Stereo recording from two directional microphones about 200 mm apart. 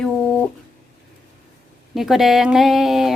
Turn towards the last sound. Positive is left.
turn(degrees=0)  # may be behind; listen again after turning